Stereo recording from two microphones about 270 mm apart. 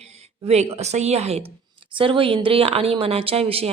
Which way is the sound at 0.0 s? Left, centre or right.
Right.